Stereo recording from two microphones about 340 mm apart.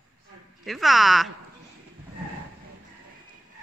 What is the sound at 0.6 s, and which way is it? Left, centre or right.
Speech, centre.